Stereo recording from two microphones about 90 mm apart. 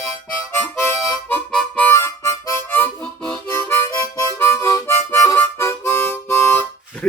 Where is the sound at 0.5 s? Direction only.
25° left (ahead or behind).